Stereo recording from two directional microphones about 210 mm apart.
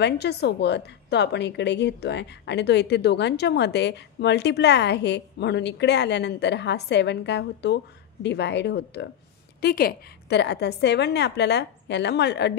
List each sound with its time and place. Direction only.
0.0 s a woman's voice: 55° left (ahead or behind)